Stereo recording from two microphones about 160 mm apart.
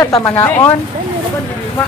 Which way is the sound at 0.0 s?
20° left (ahead or behind).